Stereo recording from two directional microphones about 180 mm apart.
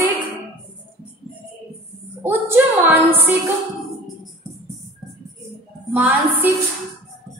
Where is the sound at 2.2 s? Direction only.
10° right (ahead or behind).